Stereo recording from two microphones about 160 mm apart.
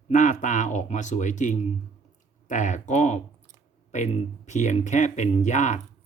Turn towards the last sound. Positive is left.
turn(degrees=50)  # may be behind; listen again after turning